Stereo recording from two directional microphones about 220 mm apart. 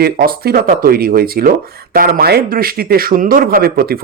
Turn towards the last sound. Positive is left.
turn(degrees=-45)  # may be behind; listen again after turning